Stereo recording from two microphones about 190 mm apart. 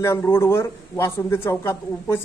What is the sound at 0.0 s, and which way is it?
Speech, 15° left (ahead or behind).